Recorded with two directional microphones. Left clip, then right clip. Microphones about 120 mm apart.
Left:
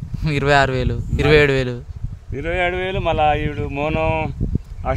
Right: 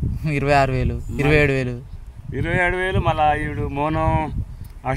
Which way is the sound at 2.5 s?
20° left (ahead or behind).